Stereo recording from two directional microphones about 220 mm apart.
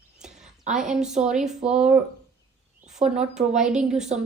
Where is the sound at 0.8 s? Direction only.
Centre (ahead or behind).